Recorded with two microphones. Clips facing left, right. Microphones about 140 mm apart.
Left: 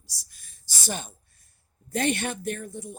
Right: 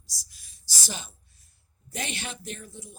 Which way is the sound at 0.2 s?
50° left (ahead or behind).